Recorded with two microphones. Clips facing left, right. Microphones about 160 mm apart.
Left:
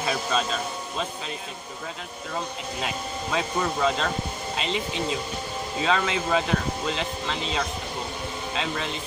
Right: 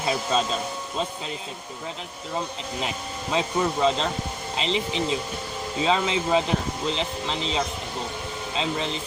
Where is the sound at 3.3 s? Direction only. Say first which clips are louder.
Right 3 dB; 25° right (ahead or behind).